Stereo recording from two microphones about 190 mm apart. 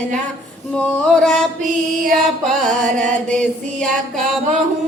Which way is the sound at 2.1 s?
Centre (ahead or behind).